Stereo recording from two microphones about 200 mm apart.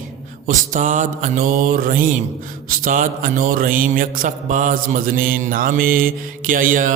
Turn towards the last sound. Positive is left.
turn(degrees=-45)  # may be behind; listen again after turning